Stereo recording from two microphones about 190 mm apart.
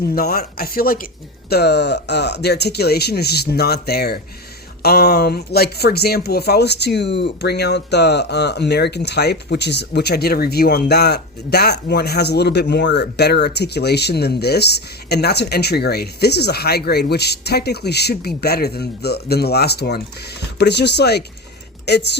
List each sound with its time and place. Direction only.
0.1 s a woman's voice: 55° left (ahead or behind)